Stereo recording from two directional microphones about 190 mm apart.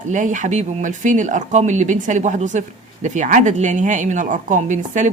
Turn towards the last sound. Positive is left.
turn(degrees=-40)  # may be behind; listen again after turning